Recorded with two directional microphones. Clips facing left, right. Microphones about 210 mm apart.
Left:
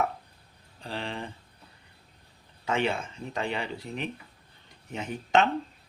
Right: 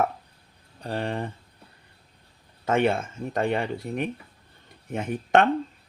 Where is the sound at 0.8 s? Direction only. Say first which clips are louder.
Right 6 dB; 50° right (ahead or behind).